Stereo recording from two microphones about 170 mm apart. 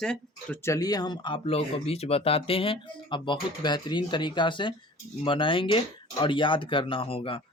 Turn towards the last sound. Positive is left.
turn(degrees=30)  # may be behind; listen again after turning